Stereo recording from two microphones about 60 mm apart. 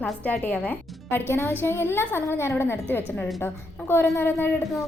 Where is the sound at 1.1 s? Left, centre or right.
Left.